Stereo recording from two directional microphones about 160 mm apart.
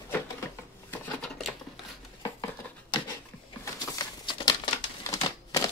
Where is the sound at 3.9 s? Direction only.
30° left (ahead or behind).